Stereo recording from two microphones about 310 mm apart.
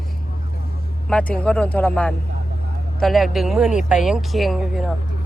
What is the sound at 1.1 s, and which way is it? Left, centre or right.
Speech, centre.